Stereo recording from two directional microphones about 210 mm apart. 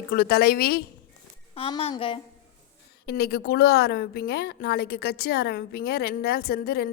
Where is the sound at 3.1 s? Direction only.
50° left (ahead or behind).